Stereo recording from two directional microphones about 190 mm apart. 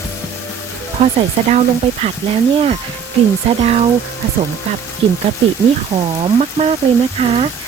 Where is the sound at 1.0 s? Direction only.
35° right (ahead or behind).